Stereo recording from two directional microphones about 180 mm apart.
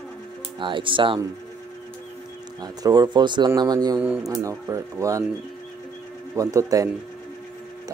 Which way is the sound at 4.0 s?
10° right (ahead or behind).